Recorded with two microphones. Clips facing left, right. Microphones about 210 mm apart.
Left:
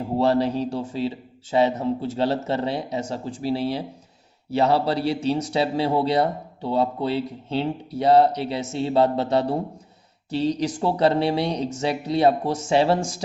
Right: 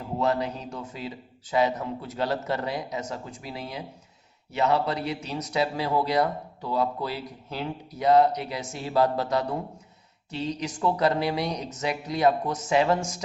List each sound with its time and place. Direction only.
0.2 s speech: 30° left (ahead or behind)